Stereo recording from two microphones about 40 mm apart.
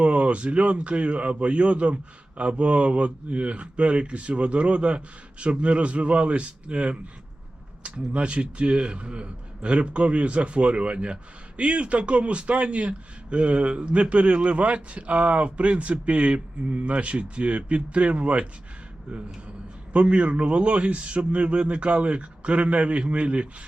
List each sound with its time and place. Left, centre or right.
0.0 s a man's voice: right
19.9 s a man's voice: right